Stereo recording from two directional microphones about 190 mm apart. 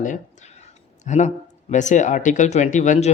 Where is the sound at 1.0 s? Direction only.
40° left (ahead or behind).